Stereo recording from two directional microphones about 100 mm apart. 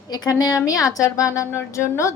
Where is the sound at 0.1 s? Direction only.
40° left (ahead or behind).